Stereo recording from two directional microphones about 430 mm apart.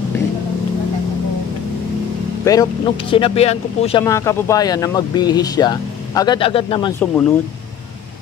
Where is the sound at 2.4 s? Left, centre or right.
Centre.